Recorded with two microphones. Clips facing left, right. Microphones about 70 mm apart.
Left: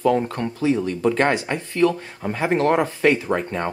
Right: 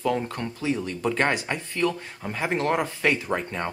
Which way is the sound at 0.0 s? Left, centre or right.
Left.